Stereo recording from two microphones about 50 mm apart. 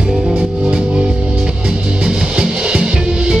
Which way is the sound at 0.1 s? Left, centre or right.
Centre.